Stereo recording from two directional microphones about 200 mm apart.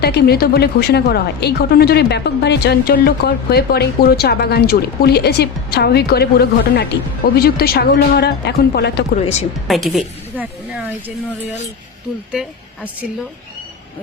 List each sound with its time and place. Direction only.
0.0 s a woman's voice: 55° left (ahead or behind)
9.2 s speech: 30° left (ahead or behind)
9.6 s a woman's voice: centre (ahead or behind)
12.3 s a woman's voice: 5° right (ahead or behind)